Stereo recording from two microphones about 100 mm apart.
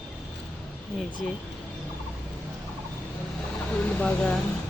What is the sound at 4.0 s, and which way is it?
Speech, 10° left (ahead or behind).